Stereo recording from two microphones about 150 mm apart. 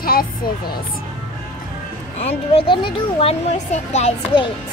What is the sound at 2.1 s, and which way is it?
Speech, 40° left (ahead or behind).